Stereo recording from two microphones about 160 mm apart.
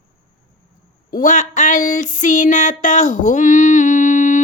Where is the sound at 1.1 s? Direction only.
55° left (ahead or behind).